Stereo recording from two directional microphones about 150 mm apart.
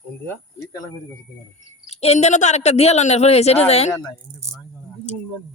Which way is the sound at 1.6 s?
45° left (ahead or behind).